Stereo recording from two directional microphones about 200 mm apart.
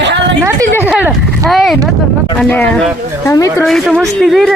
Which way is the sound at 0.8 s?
5° right (ahead or behind).